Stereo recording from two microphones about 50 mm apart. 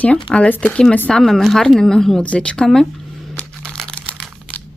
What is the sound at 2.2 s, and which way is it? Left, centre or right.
Speech, left.